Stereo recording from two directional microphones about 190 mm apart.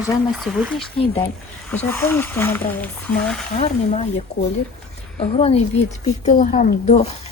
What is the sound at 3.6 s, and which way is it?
Speech, 35° left (ahead or behind).